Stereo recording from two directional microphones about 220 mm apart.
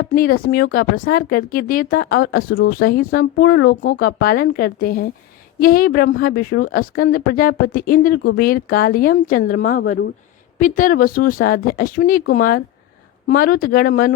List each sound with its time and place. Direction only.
0.1 s speech: 40° left (ahead or behind)